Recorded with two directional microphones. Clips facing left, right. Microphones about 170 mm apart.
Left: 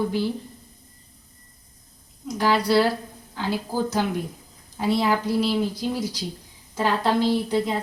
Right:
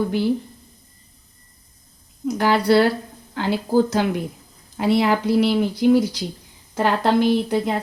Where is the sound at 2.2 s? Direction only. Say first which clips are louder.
Right 4 dB; 60° right (ahead or behind).